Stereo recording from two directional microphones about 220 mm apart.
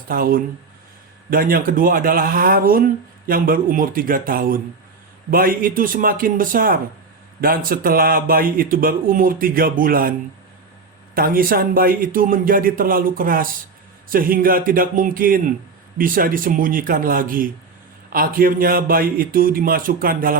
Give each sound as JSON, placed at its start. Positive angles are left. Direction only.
{"t": 0.1, "sound": "a man's voice", "side_deg": -40}